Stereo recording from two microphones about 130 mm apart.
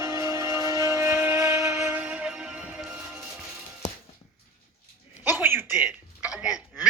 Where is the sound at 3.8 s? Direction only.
65° left (ahead or behind).